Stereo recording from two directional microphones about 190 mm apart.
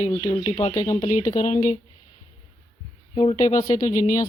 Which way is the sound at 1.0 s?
40° left (ahead or behind).